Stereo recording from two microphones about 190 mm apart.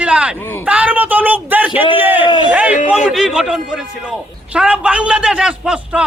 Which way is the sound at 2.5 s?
5° right (ahead or behind).